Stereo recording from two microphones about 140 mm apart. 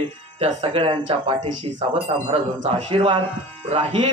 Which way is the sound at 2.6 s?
45° right (ahead or behind).